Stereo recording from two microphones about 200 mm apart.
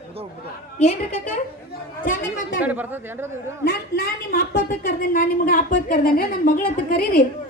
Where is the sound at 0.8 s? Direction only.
35° left (ahead or behind).